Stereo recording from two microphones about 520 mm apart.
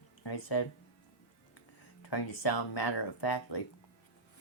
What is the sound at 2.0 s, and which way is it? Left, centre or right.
Speech, left.